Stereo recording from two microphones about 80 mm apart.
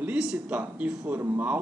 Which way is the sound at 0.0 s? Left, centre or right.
Centre.